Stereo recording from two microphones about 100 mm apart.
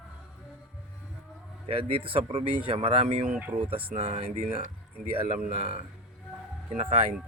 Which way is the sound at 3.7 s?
65° right (ahead or behind).